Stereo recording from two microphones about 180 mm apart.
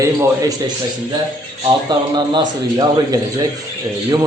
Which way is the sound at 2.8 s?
20° right (ahead or behind).